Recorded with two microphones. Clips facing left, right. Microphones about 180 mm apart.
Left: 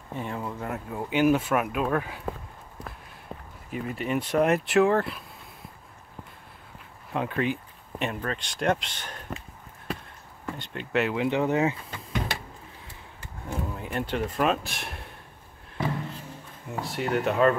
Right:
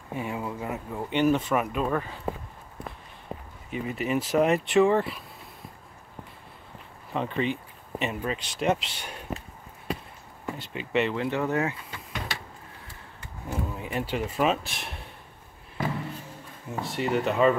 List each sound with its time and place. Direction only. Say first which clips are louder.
0.1 s speech: right 1 dB; 5° right (ahead or behind)
3.3 s a sound: right 3 dB; 10° right (ahead or behind)
3.7 s speech: right 1 dB; centre (ahead or behind)
7.1 s speech: even; 5° left (ahead or behind)
10.4 s speech: right 1 dB; 5° right (ahead or behind)
11.1 s speech: left 2 dB; 20° left (ahead or behind)
13.5 s speech: right 1 dB; centre (ahead or behind)
16.6 s speech: right 1 dB; centre (ahead or behind)